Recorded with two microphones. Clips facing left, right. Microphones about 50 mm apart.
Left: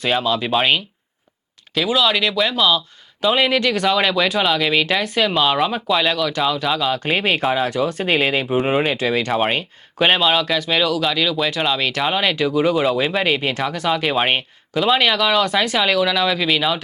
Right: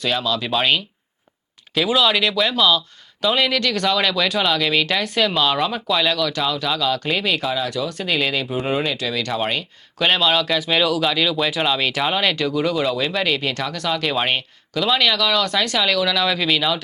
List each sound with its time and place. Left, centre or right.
0.0 s speech: left
1.7 s speech: centre; by 7.2 s left
7.2 s speech: left
10.2 s speech: centre
15.4 s speech: centre